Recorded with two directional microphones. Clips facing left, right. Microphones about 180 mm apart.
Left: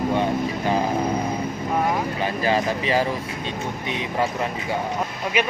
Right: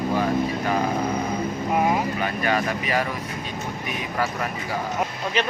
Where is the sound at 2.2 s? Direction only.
30° left (ahead or behind).